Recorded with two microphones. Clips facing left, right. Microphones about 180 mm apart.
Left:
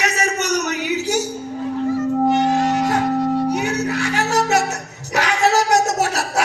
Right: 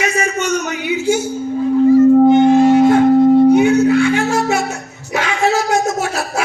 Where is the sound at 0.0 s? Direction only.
40° left (ahead or behind).